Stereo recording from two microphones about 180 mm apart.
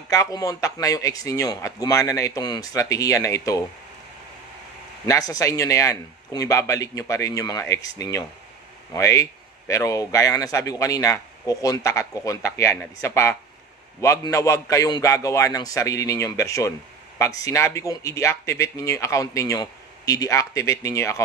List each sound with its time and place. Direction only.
0.1 s speech: 20° left (ahead or behind)
5.0 s speech: 20° left (ahead or behind)